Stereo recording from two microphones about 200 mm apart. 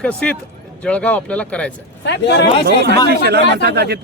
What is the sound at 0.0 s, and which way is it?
Speech, 5° left (ahead or behind).